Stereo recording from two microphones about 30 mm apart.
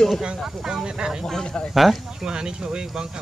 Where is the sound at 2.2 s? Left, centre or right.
Right.